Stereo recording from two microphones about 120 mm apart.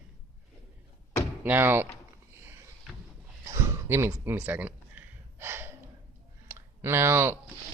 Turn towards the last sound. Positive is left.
turn(degrees=-20)  # may be behind; listen again after turning